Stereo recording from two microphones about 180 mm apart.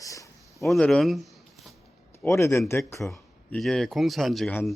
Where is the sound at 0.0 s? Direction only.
20° left (ahead or behind).